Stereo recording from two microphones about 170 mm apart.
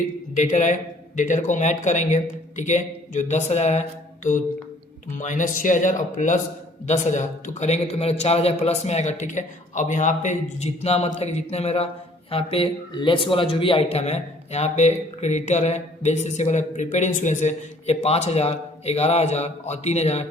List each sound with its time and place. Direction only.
0.3 s a man's voice: 45° left (ahead or behind)